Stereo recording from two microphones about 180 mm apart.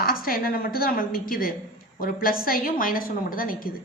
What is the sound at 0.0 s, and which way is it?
A woman's voice, 55° left (ahead or behind).